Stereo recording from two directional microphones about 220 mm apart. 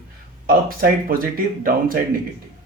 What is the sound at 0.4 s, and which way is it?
A man's voice, 40° right (ahead or behind).